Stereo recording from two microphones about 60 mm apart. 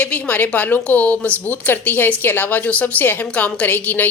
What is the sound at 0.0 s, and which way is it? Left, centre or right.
A woman's voice, left.